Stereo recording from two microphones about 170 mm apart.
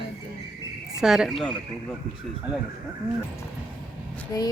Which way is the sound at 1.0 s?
Centre (ahead or behind).